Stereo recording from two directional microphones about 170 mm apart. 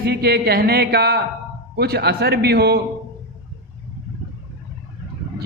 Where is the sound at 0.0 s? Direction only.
65° right (ahead or behind).